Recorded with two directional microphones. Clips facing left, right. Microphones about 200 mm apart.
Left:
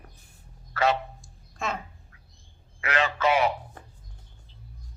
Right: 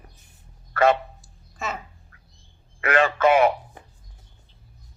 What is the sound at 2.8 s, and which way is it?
Speech, 50° right (ahead or behind).